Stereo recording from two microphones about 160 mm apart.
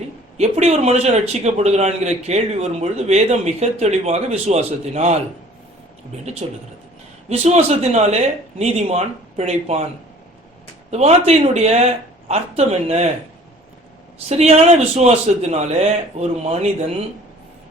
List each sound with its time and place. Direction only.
0.3 s a man's voice: 45° right (ahead or behind)
6.4 s a man's voice: 40° right (ahead or behind)
10.9 s a man's voice: 40° right (ahead or behind)
14.3 s a man's voice: 40° right (ahead or behind)